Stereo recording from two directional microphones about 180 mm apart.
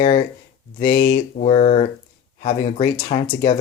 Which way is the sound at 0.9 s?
50° left (ahead or behind).